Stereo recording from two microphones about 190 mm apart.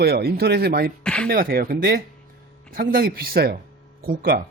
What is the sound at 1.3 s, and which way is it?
Speech, 50° right (ahead or behind).